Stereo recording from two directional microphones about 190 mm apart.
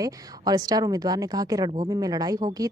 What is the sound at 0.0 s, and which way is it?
Speech, 20° right (ahead or behind).